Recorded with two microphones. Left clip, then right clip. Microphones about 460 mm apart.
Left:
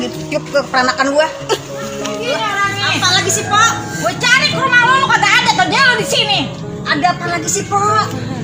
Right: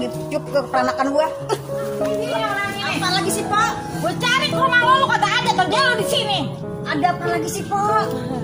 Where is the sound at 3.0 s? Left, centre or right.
Right.